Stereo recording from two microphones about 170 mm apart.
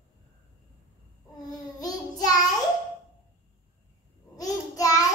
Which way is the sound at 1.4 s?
20° left (ahead or behind).